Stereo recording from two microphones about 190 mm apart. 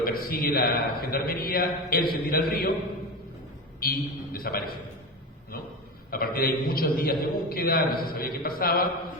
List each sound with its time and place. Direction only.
0.0 s a man's voice: 50° left (ahead or behind)
3.8 s a man's voice: 50° left (ahead or behind)
6.1 s a man's voice: 50° left (ahead or behind)